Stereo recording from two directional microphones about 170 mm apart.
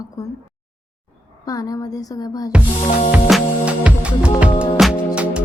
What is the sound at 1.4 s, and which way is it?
Speech, 20° left (ahead or behind).